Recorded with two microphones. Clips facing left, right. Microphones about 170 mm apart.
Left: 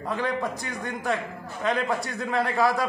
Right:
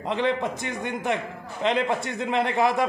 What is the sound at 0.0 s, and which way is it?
A man's voice, 20° right (ahead or behind).